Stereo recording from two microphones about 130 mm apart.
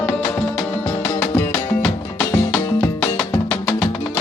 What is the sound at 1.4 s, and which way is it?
Music, 10° left (ahead or behind).